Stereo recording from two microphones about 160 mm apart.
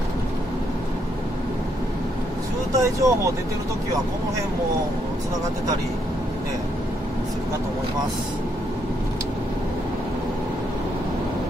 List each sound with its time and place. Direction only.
2.7 s speech: 20° right (ahead or behind)